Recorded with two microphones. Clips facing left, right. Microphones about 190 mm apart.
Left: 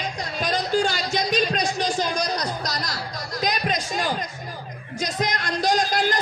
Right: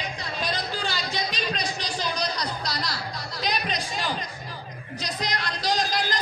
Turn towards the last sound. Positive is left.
turn(degrees=50)  # may be behind; listen again after turning